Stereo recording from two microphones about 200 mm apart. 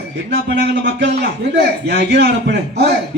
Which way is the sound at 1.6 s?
55° right (ahead or behind).